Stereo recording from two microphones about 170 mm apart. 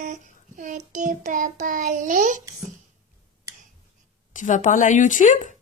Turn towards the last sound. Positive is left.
turn(degrees=50)  # may be behind; listen again after turning